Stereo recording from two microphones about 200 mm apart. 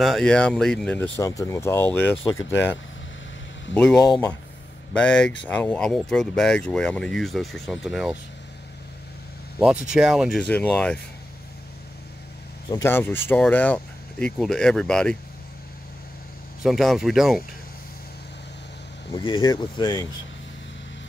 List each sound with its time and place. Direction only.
0.0 s speech: centre (ahead or behind)
1.1 s speech: 15° left (ahead or behind)
3.7 s speech: 5° left (ahead or behind)
4.0 s speech: 20° left (ahead or behind)
4.9 s speech: 5° left (ahead or behind)
9.6 s speech: 5° right (ahead or behind)
12.6 s speech: 15° left (ahead or behind)
16.6 s speech: centre (ahead or behind)
19.1 s speech: 25° left (ahead or behind)